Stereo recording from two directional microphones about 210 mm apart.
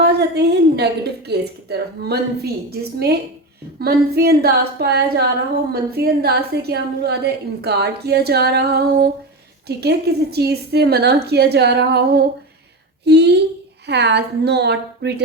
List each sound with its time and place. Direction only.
0.0 s a woman's voice: 50° right (ahead or behind)